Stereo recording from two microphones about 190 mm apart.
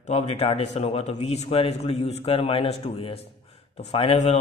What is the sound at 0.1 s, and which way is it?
A man's voice, 35° left (ahead or behind).